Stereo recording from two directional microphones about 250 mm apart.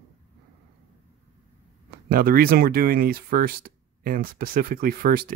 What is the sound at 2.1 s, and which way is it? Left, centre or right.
Speech, right.